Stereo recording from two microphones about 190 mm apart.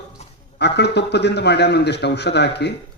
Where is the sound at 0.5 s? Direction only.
60° left (ahead or behind).